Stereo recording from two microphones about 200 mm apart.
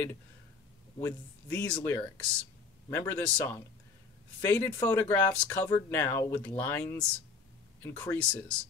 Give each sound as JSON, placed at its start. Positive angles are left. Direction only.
{"t": 1.0, "sound": "speech", "side_deg": 10}